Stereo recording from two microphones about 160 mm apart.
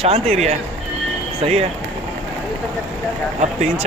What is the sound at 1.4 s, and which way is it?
Speech, 40° right (ahead or behind).